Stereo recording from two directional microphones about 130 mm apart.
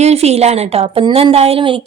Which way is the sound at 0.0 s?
55° right (ahead or behind).